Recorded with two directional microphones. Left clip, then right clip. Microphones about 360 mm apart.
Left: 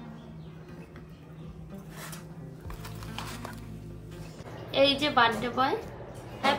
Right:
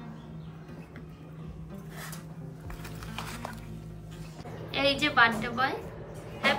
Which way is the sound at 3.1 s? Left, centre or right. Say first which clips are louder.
Even; centre.